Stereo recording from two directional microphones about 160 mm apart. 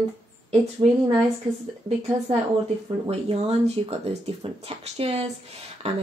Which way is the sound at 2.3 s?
35° right (ahead or behind).